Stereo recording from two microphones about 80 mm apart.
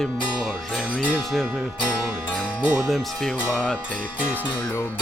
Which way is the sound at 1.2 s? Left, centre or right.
Centre.